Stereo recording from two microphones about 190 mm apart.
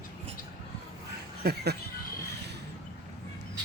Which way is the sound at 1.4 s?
55° right (ahead or behind).